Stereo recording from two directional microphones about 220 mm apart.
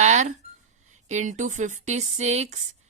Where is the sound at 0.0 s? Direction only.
30° right (ahead or behind).